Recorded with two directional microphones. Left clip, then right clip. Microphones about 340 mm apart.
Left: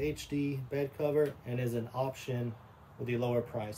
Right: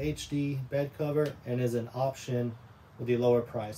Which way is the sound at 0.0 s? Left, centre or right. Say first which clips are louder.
Right 1 dB; centre.